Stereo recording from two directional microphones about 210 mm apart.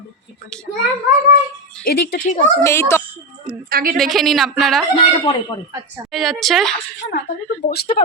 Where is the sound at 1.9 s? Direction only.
40° left (ahead or behind).